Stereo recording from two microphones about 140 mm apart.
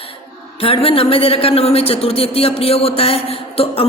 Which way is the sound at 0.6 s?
45° left (ahead or behind).